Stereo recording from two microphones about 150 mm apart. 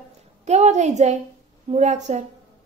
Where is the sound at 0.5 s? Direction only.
50° right (ahead or behind).